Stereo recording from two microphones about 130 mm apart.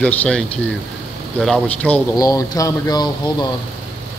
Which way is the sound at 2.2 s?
25° left (ahead or behind).